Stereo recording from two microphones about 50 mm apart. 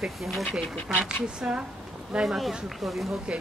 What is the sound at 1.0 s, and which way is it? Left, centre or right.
Speech, centre.